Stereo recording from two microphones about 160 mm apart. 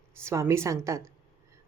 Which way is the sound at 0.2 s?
20° right (ahead or behind).